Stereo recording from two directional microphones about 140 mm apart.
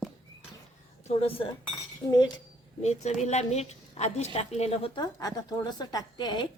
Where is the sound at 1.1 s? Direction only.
45° left (ahead or behind).